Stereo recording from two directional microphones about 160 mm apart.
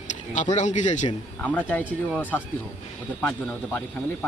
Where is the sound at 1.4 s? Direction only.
10° left (ahead or behind).